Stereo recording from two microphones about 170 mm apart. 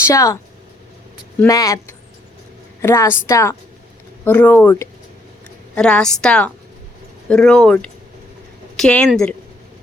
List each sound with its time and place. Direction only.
0.0 s speech: 20° left (ahead or behind)
1.5 s speech: 20° left (ahead or behind)
2.8 s a woman's voice: 15° left (ahead or behind)